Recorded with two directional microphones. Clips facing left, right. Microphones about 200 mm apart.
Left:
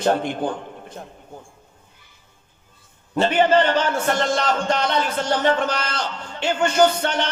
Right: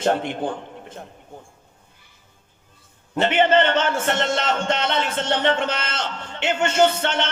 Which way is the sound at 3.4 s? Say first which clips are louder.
Even; 25° right (ahead or behind).